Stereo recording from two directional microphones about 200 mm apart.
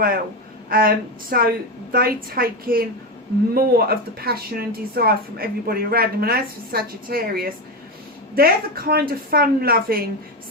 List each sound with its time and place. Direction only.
0.7 s speech: 45° right (ahead or behind)